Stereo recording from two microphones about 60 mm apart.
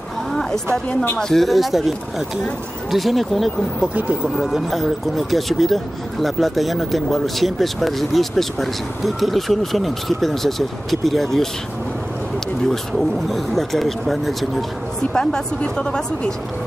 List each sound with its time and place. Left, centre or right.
0.3 s a sound: centre
1.3 s speech: centre
3.8 s speech: right
4.4 s speech: centre
12.6 s speech: centre
15.1 s speech: centre